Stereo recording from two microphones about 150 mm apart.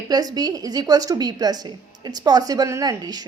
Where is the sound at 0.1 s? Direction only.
25° right (ahead or behind).